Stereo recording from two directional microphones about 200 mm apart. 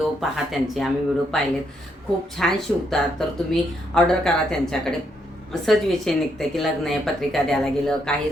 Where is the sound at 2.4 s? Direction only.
Centre (ahead or behind).